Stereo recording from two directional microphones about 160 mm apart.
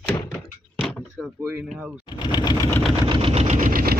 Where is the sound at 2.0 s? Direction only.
25° left (ahead or behind).